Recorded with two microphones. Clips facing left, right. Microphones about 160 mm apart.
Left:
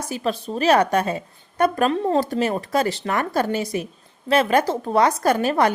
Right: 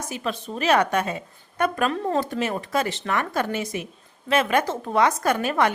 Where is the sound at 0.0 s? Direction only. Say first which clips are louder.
Left 4 dB; 35° left (ahead or behind).